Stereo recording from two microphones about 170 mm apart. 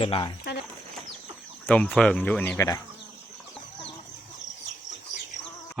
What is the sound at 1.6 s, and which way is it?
Speech, 5° left (ahead or behind).